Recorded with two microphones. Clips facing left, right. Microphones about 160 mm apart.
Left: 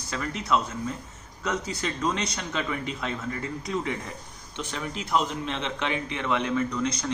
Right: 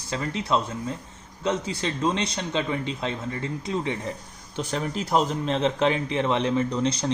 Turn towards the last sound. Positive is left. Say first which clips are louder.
# right 3 dB
turn(degrees=-30)  # may be behind; listen again after turning